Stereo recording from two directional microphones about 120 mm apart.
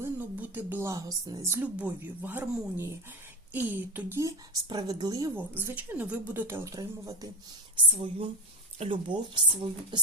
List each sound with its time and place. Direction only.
0.0 s a woman's voice: 15° right (ahead or behind); by 5.3 s 35° right (ahead or behind)
5.3 s a woman's voice: 20° right (ahead or behind)
7.9 s speech: 50° right (ahead or behind)